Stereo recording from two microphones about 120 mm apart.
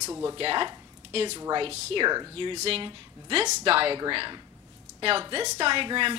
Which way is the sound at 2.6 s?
55° right (ahead or behind).